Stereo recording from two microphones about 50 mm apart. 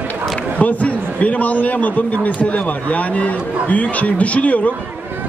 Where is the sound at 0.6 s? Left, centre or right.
Left.